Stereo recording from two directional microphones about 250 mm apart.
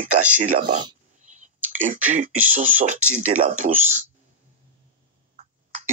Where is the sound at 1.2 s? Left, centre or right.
Right.